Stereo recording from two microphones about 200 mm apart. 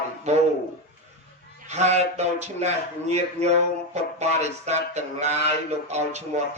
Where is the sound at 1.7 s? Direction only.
35° right (ahead or behind).